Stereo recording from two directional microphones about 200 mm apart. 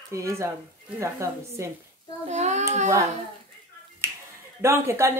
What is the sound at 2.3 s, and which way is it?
Speech, 35° right (ahead or behind).